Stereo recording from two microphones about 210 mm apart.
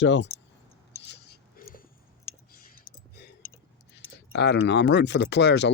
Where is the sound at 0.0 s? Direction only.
60° left (ahead or behind).